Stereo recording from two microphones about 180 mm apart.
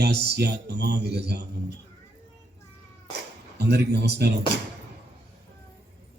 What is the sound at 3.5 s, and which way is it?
Speech, 65° right (ahead or behind).